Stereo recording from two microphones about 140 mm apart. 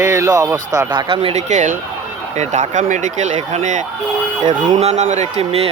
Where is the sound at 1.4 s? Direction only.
60° right (ahead or behind).